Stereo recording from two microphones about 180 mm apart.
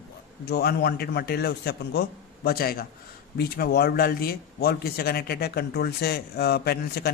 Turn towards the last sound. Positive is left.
turn(degrees=60)  # may be behind; listen again after turning